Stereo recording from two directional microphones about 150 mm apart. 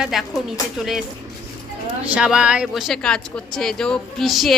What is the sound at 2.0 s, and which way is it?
Speech, 5° right (ahead or behind).